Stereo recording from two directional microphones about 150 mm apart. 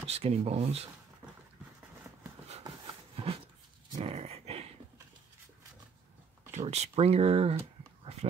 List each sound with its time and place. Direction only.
0.0 s speech: 40° right (ahead or behind)
3.2 s dog: 40° right (ahead or behind)
6.5 s speech: 45° right (ahead or behind)
8.0 s a sound: 45° right (ahead or behind)